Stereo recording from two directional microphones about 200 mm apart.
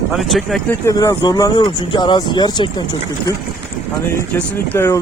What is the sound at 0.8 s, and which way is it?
Speech, 15° left (ahead or behind).